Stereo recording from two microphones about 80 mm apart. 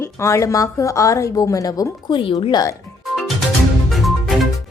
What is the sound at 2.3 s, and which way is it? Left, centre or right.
Speech, left.